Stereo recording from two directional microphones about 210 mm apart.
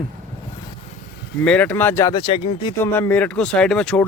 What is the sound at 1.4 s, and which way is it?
Speech, 5° left (ahead or behind).